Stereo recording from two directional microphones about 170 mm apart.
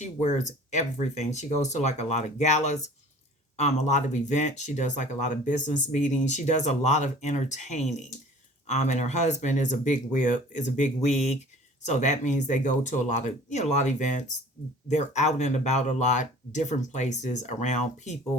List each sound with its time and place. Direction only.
0.0 s speech: 45° left (ahead or behind)